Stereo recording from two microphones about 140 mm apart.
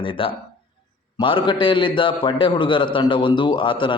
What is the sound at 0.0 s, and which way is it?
A man's voice, 40° left (ahead or behind).